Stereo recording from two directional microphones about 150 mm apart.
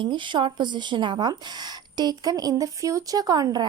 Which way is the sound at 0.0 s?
30° right (ahead or behind).